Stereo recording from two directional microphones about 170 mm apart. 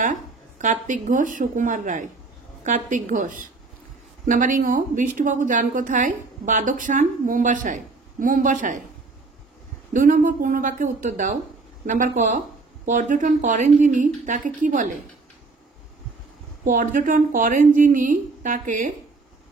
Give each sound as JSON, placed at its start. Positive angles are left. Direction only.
{"t": 0.0, "sound": "a woman's voice", "side_deg": -50}
{"t": 9.9, "sound": "a woman's voice", "side_deg": -50}
{"t": 16.6, "sound": "a woman's voice", "side_deg": -50}